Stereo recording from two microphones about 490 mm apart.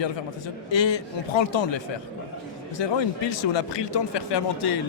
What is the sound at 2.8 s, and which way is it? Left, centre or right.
A man's voice, left.